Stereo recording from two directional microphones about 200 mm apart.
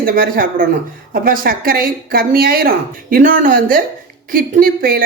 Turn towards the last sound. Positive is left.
turn(degrees=-45)  # may be behind; listen again after turning